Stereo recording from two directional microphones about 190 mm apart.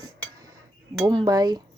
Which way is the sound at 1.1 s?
20° right (ahead or behind).